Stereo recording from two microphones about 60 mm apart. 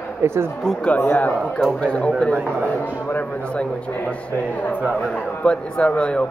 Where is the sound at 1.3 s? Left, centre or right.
Centre.